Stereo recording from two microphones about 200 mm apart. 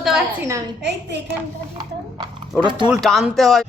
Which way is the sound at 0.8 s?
60° right (ahead or behind).